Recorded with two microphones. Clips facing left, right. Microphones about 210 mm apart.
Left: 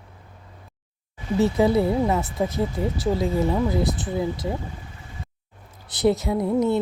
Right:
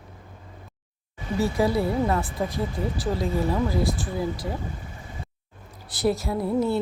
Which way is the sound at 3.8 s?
20° left (ahead or behind).